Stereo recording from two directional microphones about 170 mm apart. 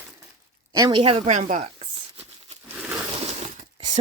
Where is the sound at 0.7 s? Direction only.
25° right (ahead or behind).